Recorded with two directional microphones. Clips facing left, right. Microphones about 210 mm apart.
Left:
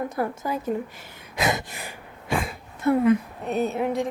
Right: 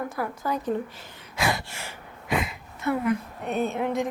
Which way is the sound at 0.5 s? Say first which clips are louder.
Even; 10° left (ahead or behind).